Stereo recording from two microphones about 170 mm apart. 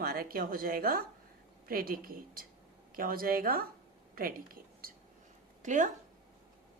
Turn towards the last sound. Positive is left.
turn(degrees=-45)  # may be behind; listen again after turning